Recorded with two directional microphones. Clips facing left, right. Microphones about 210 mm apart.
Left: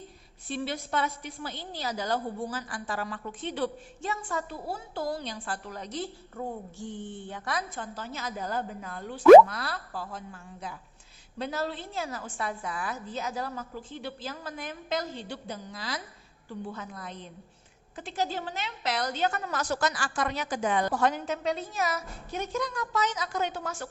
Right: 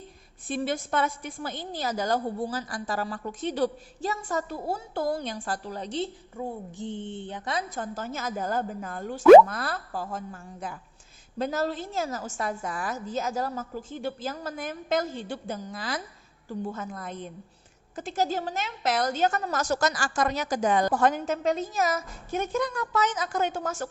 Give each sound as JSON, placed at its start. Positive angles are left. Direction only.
{"t": 0.4, "sound": "a woman's voice", "side_deg": -50}
{"t": 5.6, "sound": "a woman's voice", "side_deg": -30}
{"t": 6.3, "sound": "a sound", "side_deg": -10}
{"t": 6.7, "sound": "mantra", "side_deg": -25}
{"t": 7.7, "sound": "a woman's voice", "side_deg": -45}
{"t": 9.2, "sound": "speech", "side_deg": -5}
{"t": 9.5, "sound": "a woman's voice", "side_deg": -45}